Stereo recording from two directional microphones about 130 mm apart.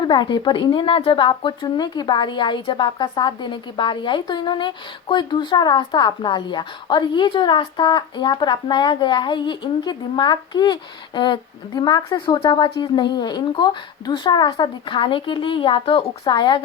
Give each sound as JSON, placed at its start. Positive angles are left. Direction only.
{"t": 0.0, "sound": "a woman's voice", "side_deg": 35}